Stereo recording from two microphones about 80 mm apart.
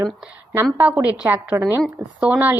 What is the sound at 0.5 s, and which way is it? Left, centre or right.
A woman's voice, right.